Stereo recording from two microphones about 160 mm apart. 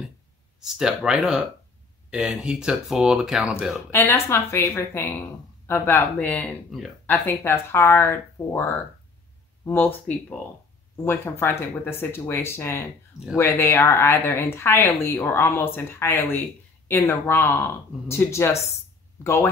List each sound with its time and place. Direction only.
0.6 s speech: 5° right (ahead or behind)
3.9 s speech: 15° left (ahead or behind)
9.7 s speech: 10° left (ahead or behind)